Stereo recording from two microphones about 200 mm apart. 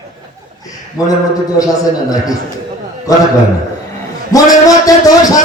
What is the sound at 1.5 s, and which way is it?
Music, 15° left (ahead or behind).